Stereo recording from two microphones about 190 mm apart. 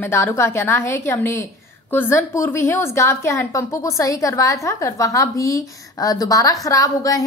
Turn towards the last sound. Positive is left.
turn(degrees=20)  # may be behind; listen again after turning